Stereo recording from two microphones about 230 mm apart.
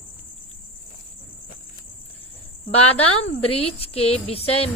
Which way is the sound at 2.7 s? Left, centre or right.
Left.